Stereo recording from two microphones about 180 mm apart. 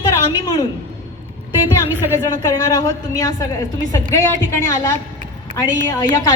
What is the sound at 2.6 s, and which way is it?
A woman's voice, 20° left (ahead or behind).